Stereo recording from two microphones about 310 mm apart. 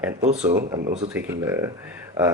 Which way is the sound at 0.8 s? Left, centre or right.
Right.